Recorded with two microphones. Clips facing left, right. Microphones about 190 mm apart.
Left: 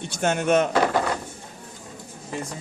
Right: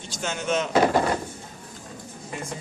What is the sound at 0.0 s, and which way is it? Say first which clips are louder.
Speech: left 7 dB; 60° left (ahead or behind).